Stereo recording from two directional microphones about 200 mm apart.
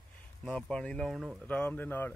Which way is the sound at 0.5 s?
5° left (ahead or behind).